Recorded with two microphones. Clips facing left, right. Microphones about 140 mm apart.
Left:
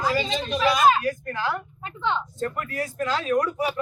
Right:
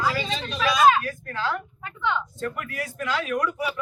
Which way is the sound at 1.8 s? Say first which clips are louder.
Left 1 dB; 30° left (ahead or behind).